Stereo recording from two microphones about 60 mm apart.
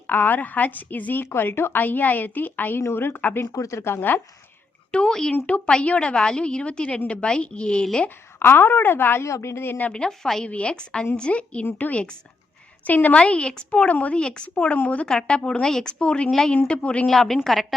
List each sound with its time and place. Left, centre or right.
0.1 s a woman's voice: left
3.4 s speech: left
3.8 s a woman's voice: left
4.9 s a woman's voice: centre
5.5 s a woman's voice: left
8.4 s a woman's voice: left
9.2 s a woman's voice: left
9.9 s a woman's voice: centre
10.4 s a woman's voice: centre
15.0 s a woman's voice: centre
16.3 s a woman's voice: centre
16.6 s speech: left
17.1 s a woman's voice: centre